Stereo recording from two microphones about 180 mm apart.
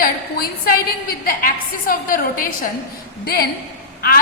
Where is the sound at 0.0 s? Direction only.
55° left (ahead or behind).